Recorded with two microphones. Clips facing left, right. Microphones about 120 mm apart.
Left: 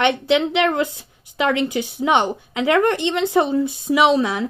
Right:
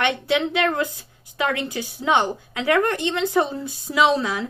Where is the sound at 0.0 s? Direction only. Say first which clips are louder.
Left 4 dB; 20° left (ahead or behind).